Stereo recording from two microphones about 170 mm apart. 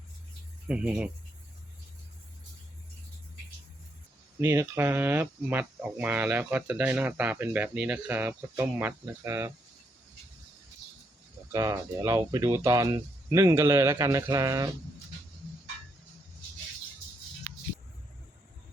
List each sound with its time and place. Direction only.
0.7 s speech: 5° right (ahead or behind)
4.4 s speech: 15° right (ahead or behind)
11.5 s speech: 20° right (ahead or behind)